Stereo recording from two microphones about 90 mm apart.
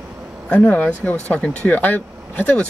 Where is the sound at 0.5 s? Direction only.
15° left (ahead or behind).